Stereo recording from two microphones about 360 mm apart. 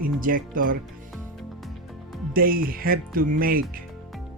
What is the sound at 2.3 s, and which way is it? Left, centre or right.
Speech, right.